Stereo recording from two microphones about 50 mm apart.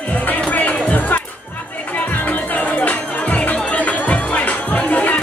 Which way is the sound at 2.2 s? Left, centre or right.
Left.